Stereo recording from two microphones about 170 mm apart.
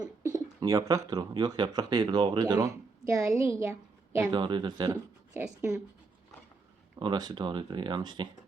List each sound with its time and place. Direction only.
0.0 s bird: 15° right (ahead or behind)
0.6 s a woman's voice: 20° right (ahead or behind)
4.2 s speech: 25° right (ahead or behind)
5.3 s a woman's voice: 10° right (ahead or behind)
7.0 s speech: 25° right (ahead or behind)